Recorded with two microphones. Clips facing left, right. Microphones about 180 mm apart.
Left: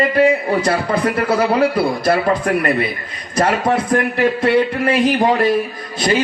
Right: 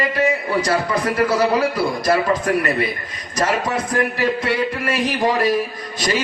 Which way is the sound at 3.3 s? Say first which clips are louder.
Left 4 dB; 55° left (ahead or behind).